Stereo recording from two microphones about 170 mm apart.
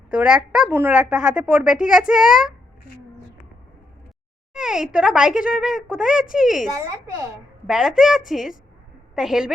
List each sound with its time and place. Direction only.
0.1 s a woman's voice: 5° right (ahead or behind)
4.5 s a woman's voice: 5° right (ahead or behind)
6.7 s a child's voice: 20° right (ahead or behind)
7.7 s a woman's voice: centre (ahead or behind)